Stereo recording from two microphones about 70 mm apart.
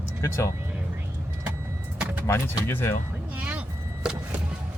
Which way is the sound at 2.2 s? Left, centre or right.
Left.